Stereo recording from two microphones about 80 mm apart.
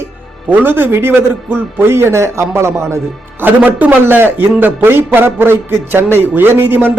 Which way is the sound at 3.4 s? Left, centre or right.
Right.